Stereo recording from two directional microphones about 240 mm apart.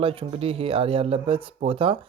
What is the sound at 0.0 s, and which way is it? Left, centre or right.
Speech, right.